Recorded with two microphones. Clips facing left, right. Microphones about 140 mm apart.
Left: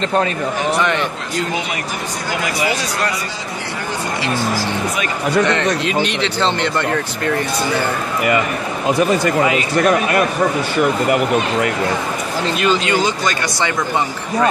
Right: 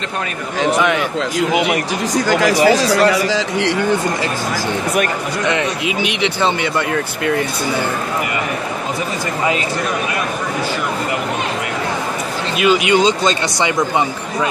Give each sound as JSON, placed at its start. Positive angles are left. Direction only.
{"t": 0.7, "sound": "a man's voice", "side_deg": -5}
{"t": 2.2, "sound": "speech", "side_deg": -90}
{"t": 6.0, "sound": "speech", "side_deg": -10}
{"t": 12.5, "sound": "speech", "side_deg": -10}